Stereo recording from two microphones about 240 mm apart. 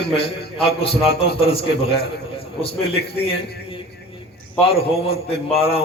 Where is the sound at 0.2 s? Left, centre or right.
Left.